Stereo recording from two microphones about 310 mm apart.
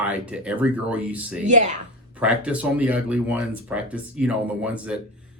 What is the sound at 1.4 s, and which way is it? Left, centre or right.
Speech, right.